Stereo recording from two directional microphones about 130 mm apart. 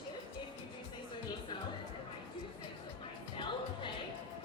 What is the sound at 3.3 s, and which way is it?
Music, 40° left (ahead or behind).